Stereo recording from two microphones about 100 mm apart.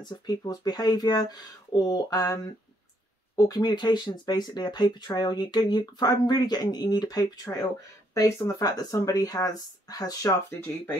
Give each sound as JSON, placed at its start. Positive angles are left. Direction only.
{"t": 0.0, "sound": "speech", "side_deg": 45}
{"t": 3.3, "sound": "speech", "side_deg": 40}